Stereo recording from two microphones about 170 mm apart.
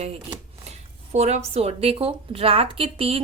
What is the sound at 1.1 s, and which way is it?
A woman's voice, 40° right (ahead or behind).